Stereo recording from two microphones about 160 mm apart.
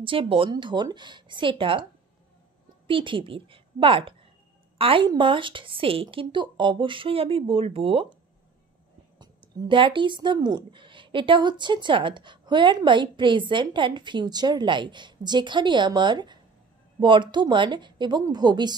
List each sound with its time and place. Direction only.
0.0 s a woman's voice: 35° right (ahead or behind)
2.9 s a woman's voice: 30° right (ahead or behind)
9.2 s speech: 30° right (ahead or behind)